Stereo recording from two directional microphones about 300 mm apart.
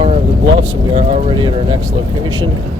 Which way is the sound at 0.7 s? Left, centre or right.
Centre.